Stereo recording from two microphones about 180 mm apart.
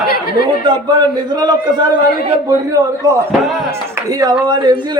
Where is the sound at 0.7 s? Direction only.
25° right (ahead or behind).